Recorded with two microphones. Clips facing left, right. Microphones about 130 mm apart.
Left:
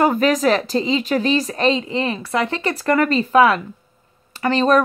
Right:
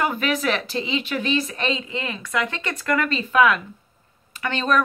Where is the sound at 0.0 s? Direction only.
40° left (ahead or behind).